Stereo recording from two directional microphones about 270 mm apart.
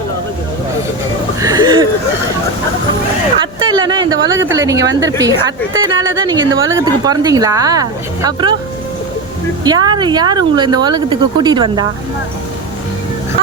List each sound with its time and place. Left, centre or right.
1.4 s a sound: centre
3.7 s a sound: centre
4.1 s speech: right
4.5 s speech: centre
6.4 s speech: right
6.7 s speech: centre
9.6 s speech: centre